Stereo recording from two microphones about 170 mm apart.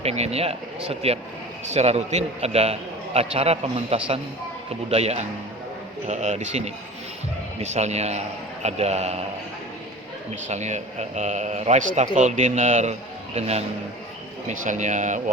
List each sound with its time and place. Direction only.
0.0 s a man's voice: 35° right (ahead or behind)
10.5 s a man's voice: 40° right (ahead or behind)